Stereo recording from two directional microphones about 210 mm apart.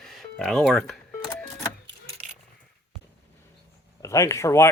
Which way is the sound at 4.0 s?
15° left (ahead or behind).